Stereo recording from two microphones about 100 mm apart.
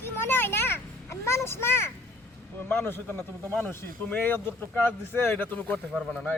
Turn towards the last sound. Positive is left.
turn(degrees=0)  # may be behind; listen again after turning